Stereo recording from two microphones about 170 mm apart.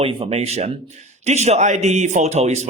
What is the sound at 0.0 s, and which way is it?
A man's voice, 35° right (ahead or behind).